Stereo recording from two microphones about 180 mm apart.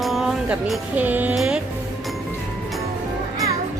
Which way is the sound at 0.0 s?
Centre (ahead or behind).